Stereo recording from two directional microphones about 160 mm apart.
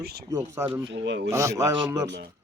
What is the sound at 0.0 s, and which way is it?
Speech, 80° right.